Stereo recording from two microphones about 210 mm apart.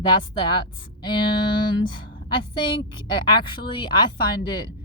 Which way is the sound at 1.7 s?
25° left (ahead or behind).